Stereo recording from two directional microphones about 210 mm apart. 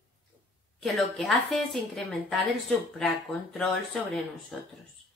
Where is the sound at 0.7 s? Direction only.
Centre (ahead or behind).